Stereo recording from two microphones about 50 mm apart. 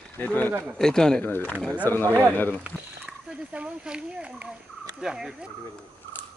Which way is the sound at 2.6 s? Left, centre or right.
Right.